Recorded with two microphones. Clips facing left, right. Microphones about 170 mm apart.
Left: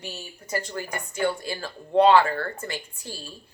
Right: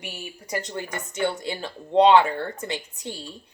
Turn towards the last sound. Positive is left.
turn(degrees=-20)  # may be behind; listen again after turning